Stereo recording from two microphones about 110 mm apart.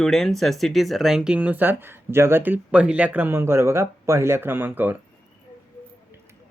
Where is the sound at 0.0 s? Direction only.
Centre (ahead or behind); by 4.9 s 15° right (ahead or behind).